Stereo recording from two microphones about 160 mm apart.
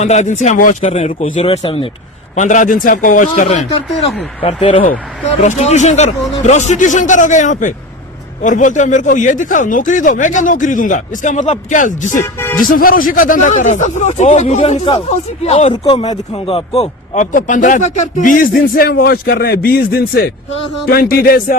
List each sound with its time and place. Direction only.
0.0 s speech: 45° left (ahead or behind)
2.3 s speech: 50° left (ahead or behind)
3.9 s speech: 5° left (ahead or behind)
4.4 s speech: 35° left (ahead or behind)
5.4 s speech: 45° left (ahead or behind)
15.8 s speech: 30° left (ahead or behind)
17.3 s speech: 55° left (ahead or behind)
18.5 s a man's voice: 70° left (ahead or behind)